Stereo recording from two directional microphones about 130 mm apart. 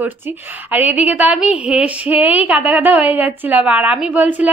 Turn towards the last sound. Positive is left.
turn(degrees=-10)  # may be behind; listen again after turning